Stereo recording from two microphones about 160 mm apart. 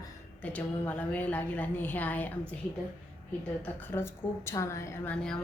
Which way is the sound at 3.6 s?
10° left (ahead or behind).